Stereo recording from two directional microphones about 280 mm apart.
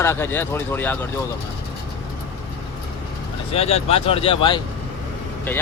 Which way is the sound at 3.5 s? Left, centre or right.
Left.